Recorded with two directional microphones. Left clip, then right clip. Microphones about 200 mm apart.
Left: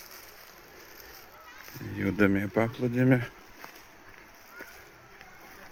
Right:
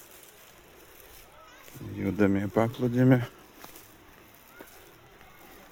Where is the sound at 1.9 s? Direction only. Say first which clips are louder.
Left 1 dB; 5° right (ahead or behind).